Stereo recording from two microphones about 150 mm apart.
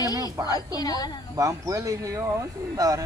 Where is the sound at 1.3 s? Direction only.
20° right (ahead or behind).